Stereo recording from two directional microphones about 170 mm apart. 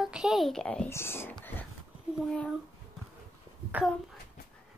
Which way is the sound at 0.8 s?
15° left (ahead or behind).